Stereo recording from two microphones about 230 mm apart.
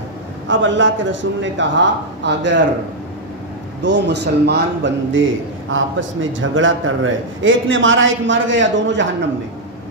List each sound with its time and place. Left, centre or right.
0.5 s speech: right
3.8 s a man's voice: right